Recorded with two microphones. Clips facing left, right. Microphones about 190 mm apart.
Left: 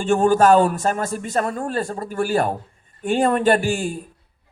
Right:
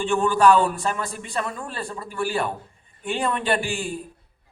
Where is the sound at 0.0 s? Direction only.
45° left (ahead or behind).